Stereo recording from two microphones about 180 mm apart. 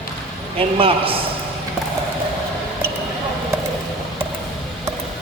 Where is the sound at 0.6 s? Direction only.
30° right (ahead or behind).